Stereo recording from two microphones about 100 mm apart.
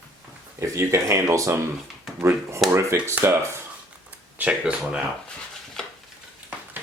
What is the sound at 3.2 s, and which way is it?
Speech, 25° right (ahead or behind).